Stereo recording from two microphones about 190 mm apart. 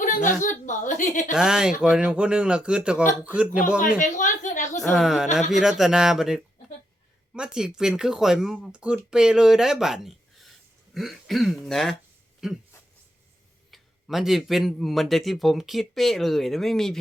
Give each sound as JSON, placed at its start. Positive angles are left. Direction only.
{"t": 0.0, "sound": "a woman's voice", "side_deg": 40}
{"t": 1.3, "sound": "a man's voice", "side_deg": -5}
{"t": 3.9, "sound": "a woman's voice", "side_deg": 40}
{"t": 4.8, "sound": "a man's voice", "side_deg": 0}
{"t": 13.7, "sound": "a man's voice", "side_deg": 0}